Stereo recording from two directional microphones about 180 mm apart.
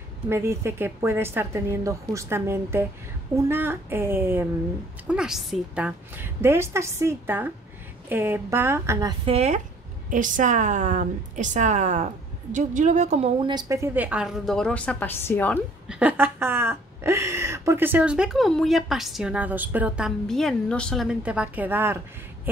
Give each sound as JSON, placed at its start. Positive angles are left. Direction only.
{"t": 0.3, "sound": "a woman's voice", "side_deg": -15}
{"t": 9.2, "sound": "a woman's voice", "side_deg": -35}
{"t": 10.0, "sound": "a woman's voice", "side_deg": -45}
{"t": 13.4, "sound": "a woman's voice", "side_deg": -25}
{"t": 15.9, "sound": "a woman's voice", "side_deg": -10}